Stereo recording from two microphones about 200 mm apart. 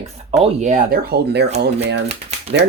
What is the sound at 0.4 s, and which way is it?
Speech, 35° right (ahead or behind).